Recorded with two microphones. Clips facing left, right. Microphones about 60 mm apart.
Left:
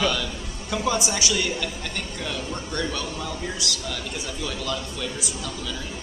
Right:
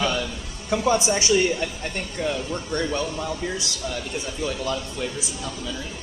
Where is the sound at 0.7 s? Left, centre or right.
Right.